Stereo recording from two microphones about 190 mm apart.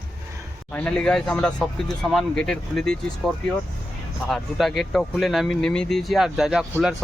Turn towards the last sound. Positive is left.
turn(degrees=0)  # may be behind; listen again after turning